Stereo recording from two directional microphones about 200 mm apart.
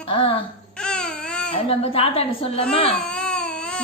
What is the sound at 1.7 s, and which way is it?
Speech, 30° left (ahead or behind).